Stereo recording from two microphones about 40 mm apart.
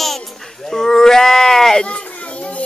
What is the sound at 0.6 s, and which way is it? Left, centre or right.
Bleat, centre.